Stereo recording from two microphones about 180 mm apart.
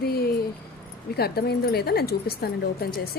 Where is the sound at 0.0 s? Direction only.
60° left (ahead or behind).